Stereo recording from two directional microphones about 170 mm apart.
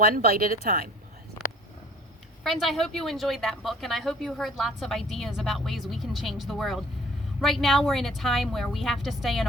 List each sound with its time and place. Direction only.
0.0 s speech: 60° right (ahead or behind)
2.4 s speech: centre (ahead or behind)